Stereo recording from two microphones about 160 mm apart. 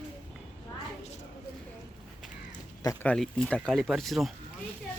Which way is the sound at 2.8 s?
20° left (ahead or behind).